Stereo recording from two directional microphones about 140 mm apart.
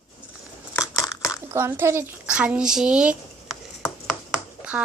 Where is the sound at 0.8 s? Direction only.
25° left (ahead or behind).